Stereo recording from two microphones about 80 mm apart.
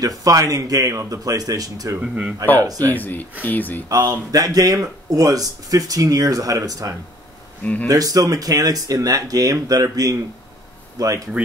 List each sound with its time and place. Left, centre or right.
0.2 s speech: right
2.0 s speech: centre
2.6 s speech: right
2.9 s speech: left
3.9 s speech: right
7.6 s speech: left
7.9 s speech: right